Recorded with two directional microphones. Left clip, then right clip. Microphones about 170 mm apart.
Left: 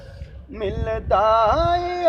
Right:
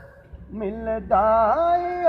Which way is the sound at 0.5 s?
45° left (ahead or behind).